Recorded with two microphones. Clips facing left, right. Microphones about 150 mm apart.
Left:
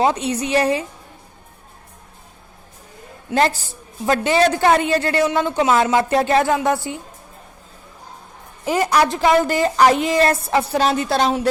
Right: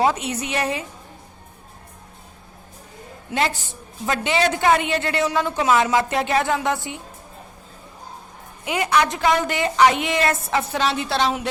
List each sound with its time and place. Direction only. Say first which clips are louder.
0.0 s a woman's voice: left 2 dB; 30° left (ahead or behind)
3.3 s a woman's voice: left 5 dB; 40° left (ahead or behind)
6.5 s a woman's voice: left 4 dB; 25° left (ahead or behind)
8.6 s a woman's voice: left 3 dB; 35° left (ahead or behind)